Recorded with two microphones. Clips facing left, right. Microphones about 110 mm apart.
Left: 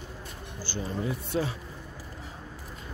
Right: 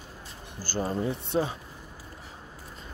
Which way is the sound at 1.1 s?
25° right (ahead or behind).